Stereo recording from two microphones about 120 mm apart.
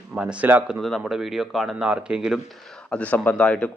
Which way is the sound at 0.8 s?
Centre (ahead or behind).